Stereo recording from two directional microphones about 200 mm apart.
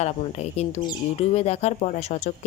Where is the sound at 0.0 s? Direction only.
35° left (ahead or behind).